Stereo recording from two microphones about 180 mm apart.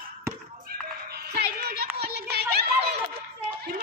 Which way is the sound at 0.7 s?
60° right (ahead or behind).